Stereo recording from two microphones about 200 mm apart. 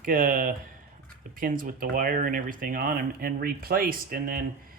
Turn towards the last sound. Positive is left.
turn(degrees=-45)  # may be behind; listen again after turning